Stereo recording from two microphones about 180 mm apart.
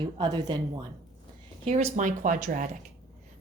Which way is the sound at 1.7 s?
40° right (ahead or behind).